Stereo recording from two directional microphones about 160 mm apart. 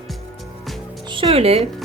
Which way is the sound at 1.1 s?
35° right (ahead or behind).